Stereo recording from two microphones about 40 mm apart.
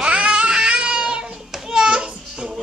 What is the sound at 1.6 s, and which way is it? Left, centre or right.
Children playing, centre.